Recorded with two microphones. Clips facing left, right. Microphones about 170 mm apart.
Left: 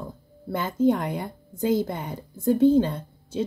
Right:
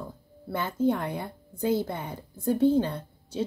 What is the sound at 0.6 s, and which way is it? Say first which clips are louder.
Speech: left 4 dB; 15° left (ahead or behind).